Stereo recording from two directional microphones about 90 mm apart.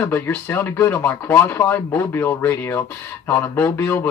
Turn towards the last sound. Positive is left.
turn(degrees=25)  # may be behind; listen again after turning